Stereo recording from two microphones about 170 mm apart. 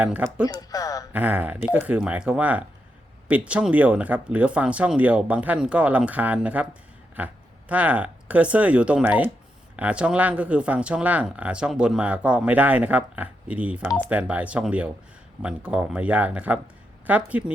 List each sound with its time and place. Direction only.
0.0 s speech: 5° right (ahead or behind)
0.4 s speech: 20° left (ahead or behind)
1.1 s speech: 10° right (ahead or behind)